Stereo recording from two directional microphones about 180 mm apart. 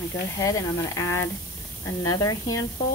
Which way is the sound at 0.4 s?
20° left (ahead or behind).